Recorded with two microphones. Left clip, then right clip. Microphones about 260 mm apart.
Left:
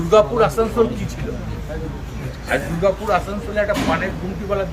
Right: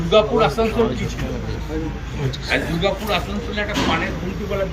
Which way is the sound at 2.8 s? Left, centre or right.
Centre.